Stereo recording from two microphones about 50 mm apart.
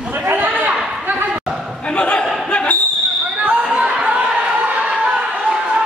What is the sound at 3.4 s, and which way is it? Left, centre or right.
Basketball bounce, right.